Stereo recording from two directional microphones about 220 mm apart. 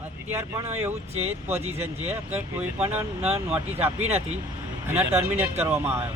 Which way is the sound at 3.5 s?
10° right (ahead or behind).